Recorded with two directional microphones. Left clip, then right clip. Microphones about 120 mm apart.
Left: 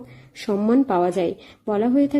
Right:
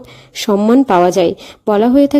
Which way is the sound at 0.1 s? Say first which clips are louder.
Right 10 dB; 40° right (ahead or behind).